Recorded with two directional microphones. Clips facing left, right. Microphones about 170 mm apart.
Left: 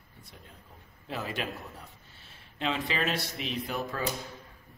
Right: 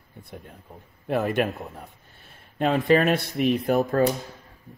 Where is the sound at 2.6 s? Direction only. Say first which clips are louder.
Right 11 dB; 50° right (ahead or behind).